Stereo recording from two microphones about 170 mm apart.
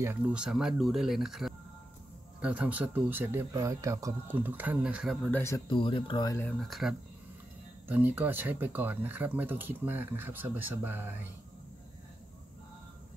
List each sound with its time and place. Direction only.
0.0 s speech: 10° right (ahead or behind)
5.3 s speech: 15° left (ahead or behind)
5.7 s speech: 30° left (ahead or behind)
6.6 s speech: centre (ahead or behind)